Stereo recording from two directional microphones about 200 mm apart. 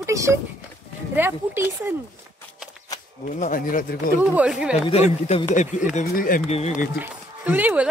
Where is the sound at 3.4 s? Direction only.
45° left (ahead or behind).